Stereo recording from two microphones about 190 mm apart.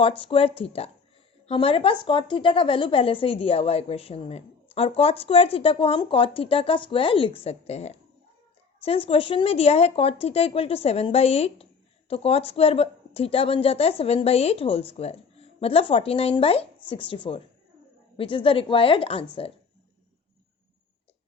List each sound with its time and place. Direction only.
0.0 s a woman's voice: 30° left (ahead or behind)